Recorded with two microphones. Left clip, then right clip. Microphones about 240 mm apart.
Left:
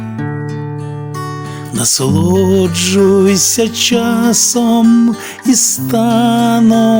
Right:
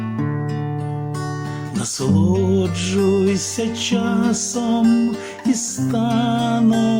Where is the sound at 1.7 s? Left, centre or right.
Left.